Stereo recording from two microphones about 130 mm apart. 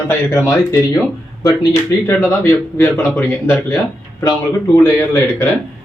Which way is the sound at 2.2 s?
20° left (ahead or behind).